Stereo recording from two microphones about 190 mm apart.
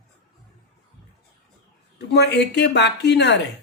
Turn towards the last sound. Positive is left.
turn(degrees=65)  # may be behind; listen again after turning